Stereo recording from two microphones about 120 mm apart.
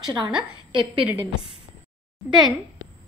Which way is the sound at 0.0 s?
40° right (ahead or behind).